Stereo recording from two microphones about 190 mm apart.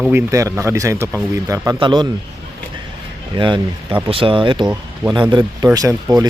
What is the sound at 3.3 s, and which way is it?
Speech, 25° right (ahead or behind).